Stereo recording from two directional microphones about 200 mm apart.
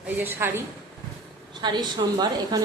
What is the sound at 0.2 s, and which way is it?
Speech, 10° right (ahead or behind).